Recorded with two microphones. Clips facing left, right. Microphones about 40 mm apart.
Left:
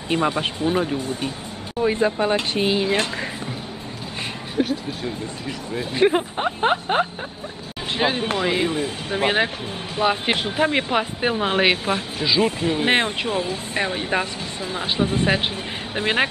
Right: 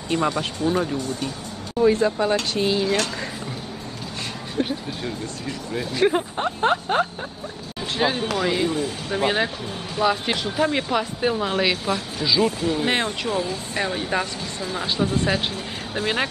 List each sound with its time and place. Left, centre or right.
0.1 s speech: left
4.6 s speech: centre
5.9 s speech: centre